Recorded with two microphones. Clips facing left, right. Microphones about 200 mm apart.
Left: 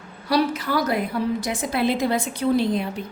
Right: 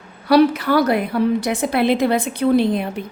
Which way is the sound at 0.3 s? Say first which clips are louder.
Right 8 dB; 65° right (ahead or behind).